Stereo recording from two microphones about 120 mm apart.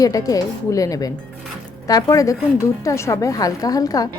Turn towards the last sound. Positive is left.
turn(degrees=30)  # may be behind; listen again after turning